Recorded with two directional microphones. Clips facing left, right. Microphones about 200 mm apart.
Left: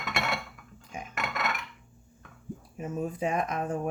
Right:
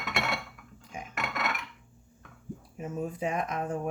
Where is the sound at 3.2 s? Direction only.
45° left (ahead or behind).